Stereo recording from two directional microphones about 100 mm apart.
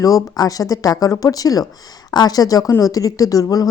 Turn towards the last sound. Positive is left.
turn(degrees=35)  # may be behind; listen again after turning